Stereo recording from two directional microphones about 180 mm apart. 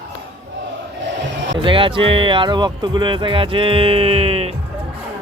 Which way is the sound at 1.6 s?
30° right (ahead or behind).